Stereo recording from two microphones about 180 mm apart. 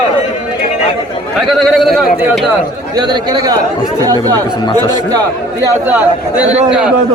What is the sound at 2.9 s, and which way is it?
Speech, 25° right (ahead or behind).